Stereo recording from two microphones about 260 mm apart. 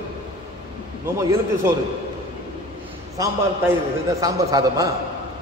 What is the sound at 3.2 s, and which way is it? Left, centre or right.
A man's voice, centre.